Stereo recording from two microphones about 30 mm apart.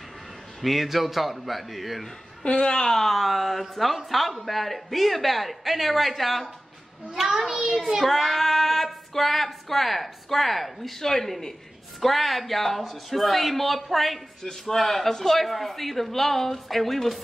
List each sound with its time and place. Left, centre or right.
0.6 s speech: centre
2.4 s a woman's voice: left
2.9 s speech: centre
7.7 s speech: centre